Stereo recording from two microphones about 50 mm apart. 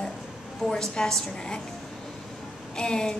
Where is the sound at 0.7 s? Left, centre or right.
Centre.